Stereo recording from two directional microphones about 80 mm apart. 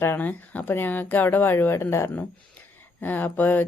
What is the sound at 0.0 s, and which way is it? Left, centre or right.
Speech, left.